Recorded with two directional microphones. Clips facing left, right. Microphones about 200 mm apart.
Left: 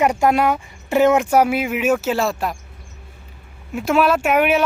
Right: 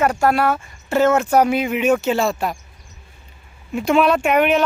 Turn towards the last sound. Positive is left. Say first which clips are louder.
# right 1 dB
turn(degrees=5)  # may be behind; listen again after turning